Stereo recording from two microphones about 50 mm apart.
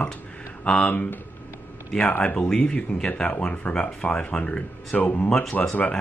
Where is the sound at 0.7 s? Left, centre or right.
Left.